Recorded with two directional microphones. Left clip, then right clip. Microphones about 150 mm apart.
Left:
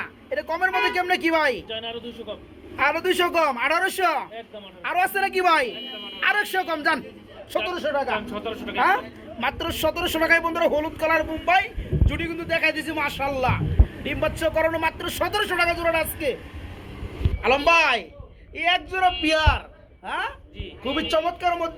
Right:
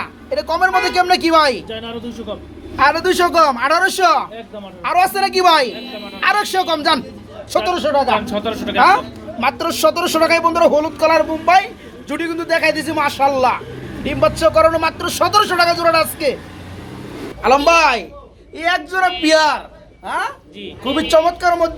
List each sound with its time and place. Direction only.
0.0 s speech: centre (ahead or behind)
1.7 s speech: 70° right (ahead or behind)
2.7 s a woman's voice: 5° left (ahead or behind)
7.7 s speech: 15° right (ahead or behind)
8.3 s a woman's voice: 65° right (ahead or behind)
8.7 s a woman's voice: centre (ahead or behind)
17.4 s a woman's voice: centre (ahead or behind)
18.5 s a man's voice: 10° left (ahead or behind)
19.2 s a man's voice: 25° left (ahead or behind)
20.9 s a man's voice: 15° left (ahead or behind)